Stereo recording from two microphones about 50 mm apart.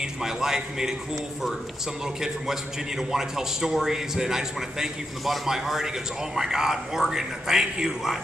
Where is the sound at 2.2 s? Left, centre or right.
Centre.